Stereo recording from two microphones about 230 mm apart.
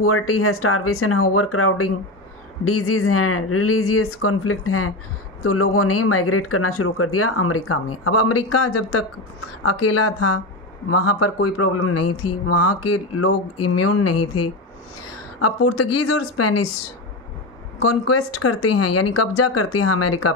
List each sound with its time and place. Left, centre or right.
0.0 s speech: left
9.7 s speech: left
15.4 s speech: left
17.8 s speech: left